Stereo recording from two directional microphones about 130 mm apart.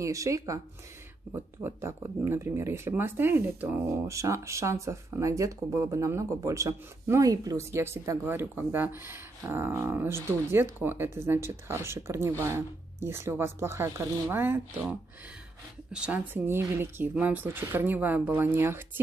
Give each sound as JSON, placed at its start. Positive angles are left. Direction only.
{"t": 0.0, "sound": "speech", "side_deg": -25}
{"t": 15.9, "sound": "speech", "side_deg": -10}